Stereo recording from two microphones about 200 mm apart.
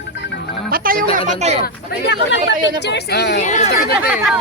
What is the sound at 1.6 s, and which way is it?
Speech, 60° left (ahead or behind).